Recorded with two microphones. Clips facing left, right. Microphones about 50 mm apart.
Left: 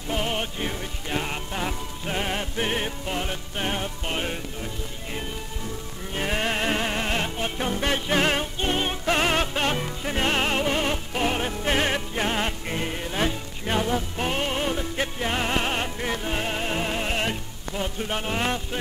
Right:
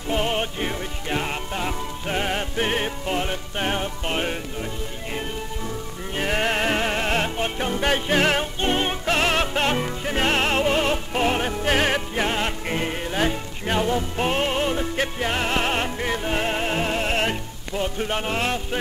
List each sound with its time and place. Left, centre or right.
0.1 s music: centre
6.1 s music: centre